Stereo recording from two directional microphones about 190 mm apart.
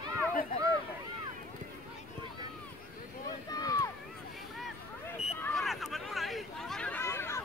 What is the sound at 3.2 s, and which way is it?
Boat, 20° left (ahead or behind).